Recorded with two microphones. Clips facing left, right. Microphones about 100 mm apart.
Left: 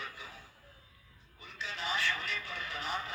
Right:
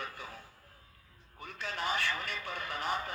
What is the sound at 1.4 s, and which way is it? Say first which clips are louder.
Speech: right 4 dB; 50° right (ahead or behind).